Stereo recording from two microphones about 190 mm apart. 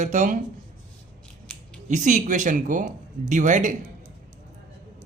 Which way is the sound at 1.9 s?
40° right (ahead or behind).